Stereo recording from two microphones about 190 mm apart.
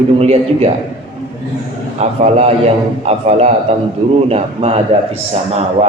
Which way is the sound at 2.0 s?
35° right (ahead or behind).